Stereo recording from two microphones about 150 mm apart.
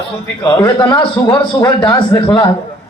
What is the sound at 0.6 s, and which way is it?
Speech, 30° left (ahead or behind).